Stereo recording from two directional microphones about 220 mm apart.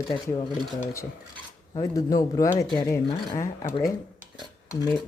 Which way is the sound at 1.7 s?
15° left (ahead or behind).